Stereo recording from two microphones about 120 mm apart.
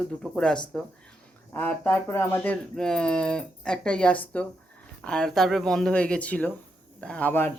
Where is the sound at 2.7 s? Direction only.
5° left (ahead or behind).